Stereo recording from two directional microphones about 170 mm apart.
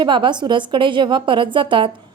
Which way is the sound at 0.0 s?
30° right (ahead or behind).